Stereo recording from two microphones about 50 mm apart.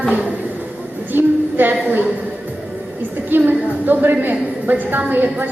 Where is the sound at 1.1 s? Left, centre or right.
Right.